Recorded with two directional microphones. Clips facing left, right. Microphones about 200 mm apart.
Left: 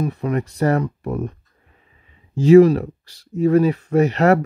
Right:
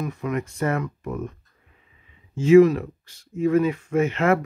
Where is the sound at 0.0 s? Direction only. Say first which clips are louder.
Left 5 dB; 35° left (ahead or behind).